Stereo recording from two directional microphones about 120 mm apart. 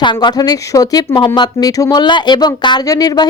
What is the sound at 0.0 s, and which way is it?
Speech, 40° left (ahead or behind).